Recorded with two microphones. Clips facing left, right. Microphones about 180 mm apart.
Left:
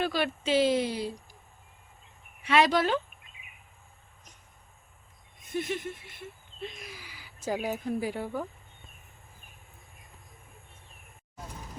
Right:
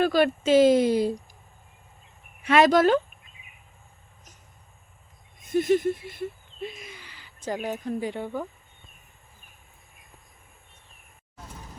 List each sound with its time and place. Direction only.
0.0 s speech: 45° right (ahead or behind)
2.4 s speech: 50° right (ahead or behind)
5.5 s a sound: 40° right (ahead or behind)
6.6 s speech: 5° right (ahead or behind)